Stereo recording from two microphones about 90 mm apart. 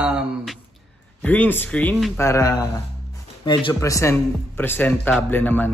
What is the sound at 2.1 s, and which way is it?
Speech, 35° left (ahead or behind).